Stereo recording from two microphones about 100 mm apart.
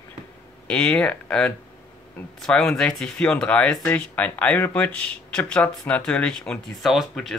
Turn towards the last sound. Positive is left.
turn(degrees=5)  # may be behind; listen again after turning